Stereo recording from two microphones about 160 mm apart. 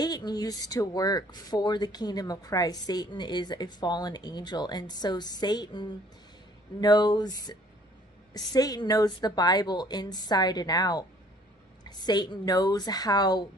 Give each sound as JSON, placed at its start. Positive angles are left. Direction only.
{"t": 0.0, "sound": "speech", "side_deg": 25}
{"t": 8.5, "sound": "speech", "side_deg": 25}